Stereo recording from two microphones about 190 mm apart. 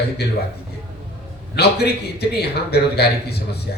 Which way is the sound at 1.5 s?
60° left (ahead or behind).